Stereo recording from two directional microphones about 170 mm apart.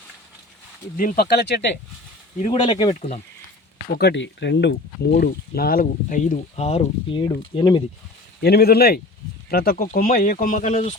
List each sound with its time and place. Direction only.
0.9 s speech: 60° left (ahead or behind); by 1.6 s 75° left (ahead or behind)
2.5 s speech: 30° left (ahead or behind)
2.9 s speech: 40° left (ahead or behind)
3.9 s speech: 80° left; by 7.2 s 40° left (ahead or behind)
7.2 s speech: 25° left (ahead or behind)
8.4 s speech: 70° left (ahead or behind); by 10.9 s 45° left (ahead or behind)